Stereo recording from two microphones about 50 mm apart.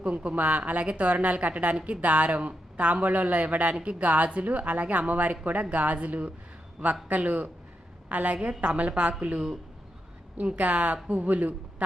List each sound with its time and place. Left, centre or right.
0.0 s a man's voice: right
10.4 s speech: right